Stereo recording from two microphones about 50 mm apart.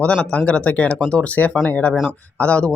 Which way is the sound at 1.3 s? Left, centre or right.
Left.